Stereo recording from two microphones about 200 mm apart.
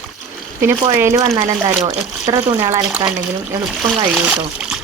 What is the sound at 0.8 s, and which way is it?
Speech, 15° right (ahead or behind).